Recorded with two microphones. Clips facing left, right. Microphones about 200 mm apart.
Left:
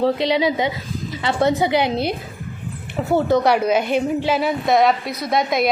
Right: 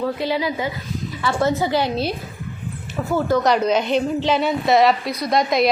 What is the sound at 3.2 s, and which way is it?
Speech, 20° left (ahead or behind).